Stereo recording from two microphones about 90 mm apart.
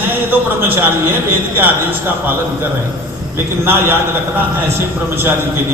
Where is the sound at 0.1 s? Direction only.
25° right (ahead or behind).